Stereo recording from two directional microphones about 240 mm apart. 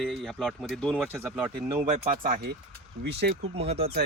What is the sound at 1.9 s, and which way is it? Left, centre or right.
Speech, right.